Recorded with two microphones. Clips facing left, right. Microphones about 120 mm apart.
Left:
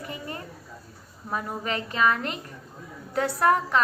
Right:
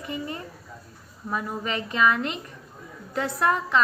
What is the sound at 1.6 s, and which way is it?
A woman's voice, 45° left (ahead or behind).